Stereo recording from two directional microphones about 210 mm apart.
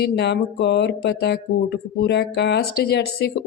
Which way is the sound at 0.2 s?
55° left (ahead or behind).